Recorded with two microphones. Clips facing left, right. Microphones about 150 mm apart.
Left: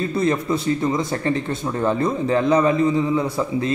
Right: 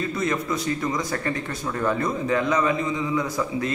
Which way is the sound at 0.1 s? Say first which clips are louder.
Left 5 dB; 30° left (ahead or behind).